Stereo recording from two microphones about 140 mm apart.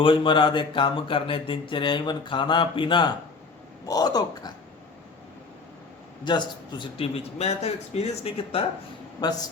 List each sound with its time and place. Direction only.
0.0 s speech: 40° left (ahead or behind)
6.2 s a man's voice: 30° left (ahead or behind)
9.2 s speech: 30° left (ahead or behind)